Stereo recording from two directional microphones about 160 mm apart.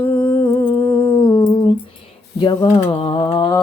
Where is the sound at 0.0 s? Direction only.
10° left (ahead or behind).